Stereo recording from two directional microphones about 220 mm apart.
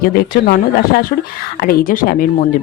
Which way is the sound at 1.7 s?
40° left (ahead or behind).